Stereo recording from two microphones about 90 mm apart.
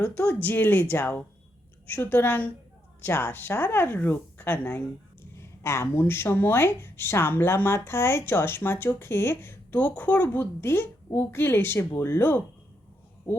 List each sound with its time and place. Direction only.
0.4 s speech: 20° left (ahead or behind)
5.4 s speech: 30° left (ahead or behind)